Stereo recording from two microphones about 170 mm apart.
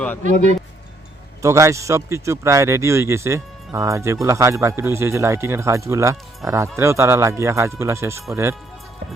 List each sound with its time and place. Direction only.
1.4 s speech: 15° right (ahead or behind)